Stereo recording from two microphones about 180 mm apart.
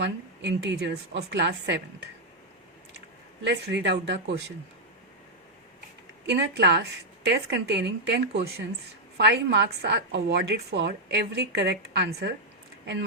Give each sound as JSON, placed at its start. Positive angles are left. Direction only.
{"t": 0.0, "sound": "a woman's voice", "side_deg": -75}
{"t": 3.4, "sound": "a woman's voice", "side_deg": -70}
{"t": 6.2, "sound": "a woman's voice", "side_deg": -70}